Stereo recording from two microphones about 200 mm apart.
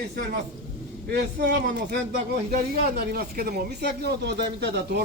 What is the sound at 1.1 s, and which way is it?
Speech, 55° right (ahead or behind).